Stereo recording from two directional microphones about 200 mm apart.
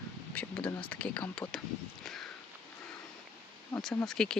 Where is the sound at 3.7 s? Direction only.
5° left (ahead or behind).